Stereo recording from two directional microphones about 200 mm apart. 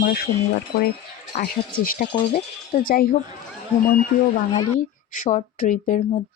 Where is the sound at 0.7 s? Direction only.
50° left (ahead or behind).